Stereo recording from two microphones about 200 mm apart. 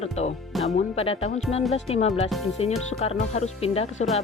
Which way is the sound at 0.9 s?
30° left (ahead or behind).